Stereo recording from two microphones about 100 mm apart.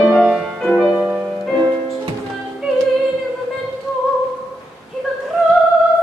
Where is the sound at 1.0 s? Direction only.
15° right (ahead or behind).